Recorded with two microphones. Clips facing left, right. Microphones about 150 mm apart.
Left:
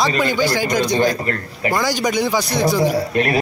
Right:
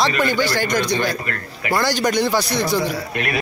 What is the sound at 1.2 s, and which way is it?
Speech, 30° left (ahead or behind).